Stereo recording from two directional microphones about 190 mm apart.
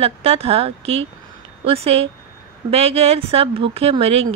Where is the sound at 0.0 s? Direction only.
30° right (ahead or behind).